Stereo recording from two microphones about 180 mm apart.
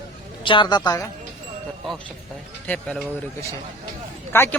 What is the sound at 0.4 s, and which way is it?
Speech, 25° left (ahead or behind).